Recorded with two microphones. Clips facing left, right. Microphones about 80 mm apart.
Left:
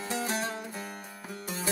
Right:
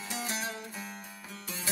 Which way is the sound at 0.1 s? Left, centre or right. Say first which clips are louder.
Left 5 dB; left.